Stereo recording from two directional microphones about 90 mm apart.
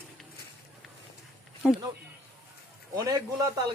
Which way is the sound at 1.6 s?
5° right (ahead or behind).